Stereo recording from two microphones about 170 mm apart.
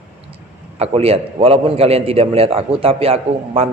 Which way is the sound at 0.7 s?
35° right (ahead or behind).